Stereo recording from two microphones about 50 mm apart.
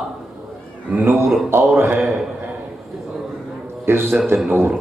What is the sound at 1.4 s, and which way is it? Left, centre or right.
Mantra, right.